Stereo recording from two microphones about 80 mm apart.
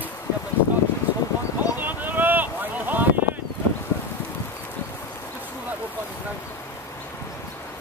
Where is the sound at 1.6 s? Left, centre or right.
Right.